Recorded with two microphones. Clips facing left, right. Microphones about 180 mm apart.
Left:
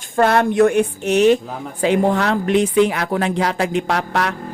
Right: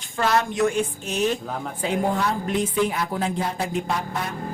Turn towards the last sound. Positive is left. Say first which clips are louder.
# left 7 dB
turn(degrees=80)